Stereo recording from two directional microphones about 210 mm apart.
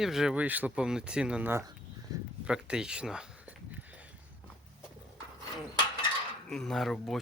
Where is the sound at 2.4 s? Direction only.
5° right (ahead or behind).